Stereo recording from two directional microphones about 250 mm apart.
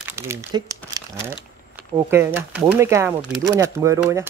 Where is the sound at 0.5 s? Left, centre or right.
Centre.